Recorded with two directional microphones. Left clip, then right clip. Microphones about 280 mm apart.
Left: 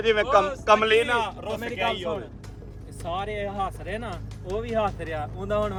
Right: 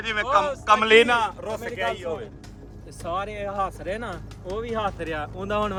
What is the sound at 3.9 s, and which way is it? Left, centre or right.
Speech, centre.